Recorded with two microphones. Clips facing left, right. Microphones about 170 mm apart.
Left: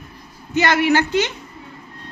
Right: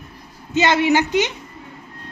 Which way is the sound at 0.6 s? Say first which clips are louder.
Even; 20° right (ahead or behind).